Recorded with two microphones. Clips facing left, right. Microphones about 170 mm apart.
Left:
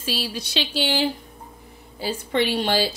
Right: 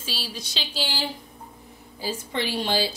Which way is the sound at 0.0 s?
60° left (ahead or behind).